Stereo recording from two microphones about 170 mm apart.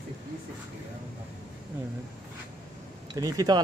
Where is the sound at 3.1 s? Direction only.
20° right (ahead or behind).